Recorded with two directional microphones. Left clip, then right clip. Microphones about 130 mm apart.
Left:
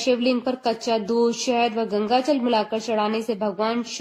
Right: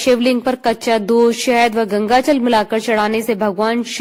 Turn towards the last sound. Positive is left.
turn(degrees=-50)  # may be behind; listen again after turning